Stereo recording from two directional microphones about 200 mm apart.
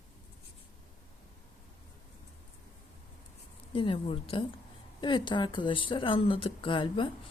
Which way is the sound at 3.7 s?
25° left (ahead or behind).